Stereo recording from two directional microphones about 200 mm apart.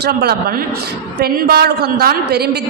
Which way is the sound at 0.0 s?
55° right (ahead or behind).